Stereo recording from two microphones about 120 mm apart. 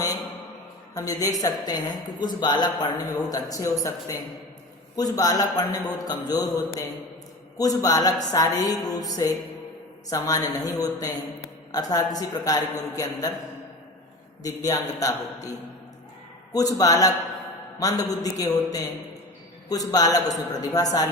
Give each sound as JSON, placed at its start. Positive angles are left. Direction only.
{"t": 0.9, "sound": "a woman's voice", "side_deg": 30}
{"t": 14.4, "sound": "a man's voice", "side_deg": 30}